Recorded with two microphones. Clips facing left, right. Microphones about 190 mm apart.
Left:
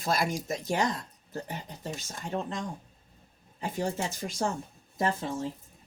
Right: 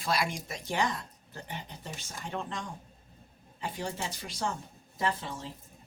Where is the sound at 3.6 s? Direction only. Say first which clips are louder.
Left 5 dB; 45° left (ahead or behind).